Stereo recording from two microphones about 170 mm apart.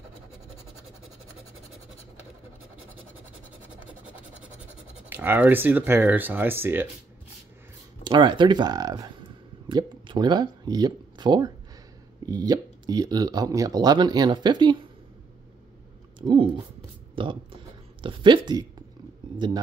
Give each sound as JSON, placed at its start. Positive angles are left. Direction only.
{"t": 5.1, "sound": "speech", "side_deg": -10}
{"t": 8.0, "sound": "speech", "side_deg": -25}
{"t": 16.2, "sound": "a sound", "side_deg": -30}
{"t": 19.3, "sound": "speech", "side_deg": -25}